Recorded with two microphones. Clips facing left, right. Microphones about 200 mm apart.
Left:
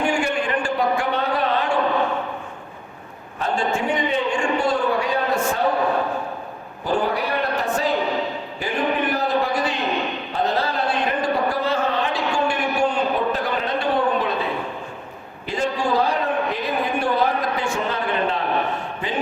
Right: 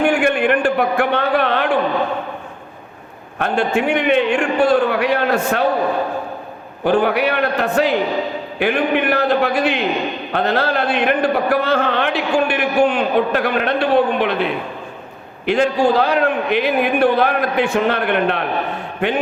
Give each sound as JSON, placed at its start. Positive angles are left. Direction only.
{"t": 0.0, "sound": "a sound", "side_deg": -60}
{"t": 3.3, "sound": "a man's voice", "side_deg": -65}
{"t": 6.8, "sound": "a man's voice", "side_deg": -65}